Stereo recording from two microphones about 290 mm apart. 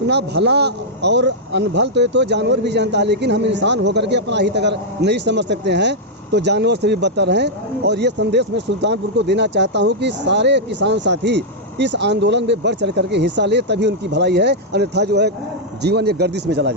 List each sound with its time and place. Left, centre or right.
0.1 s speech: right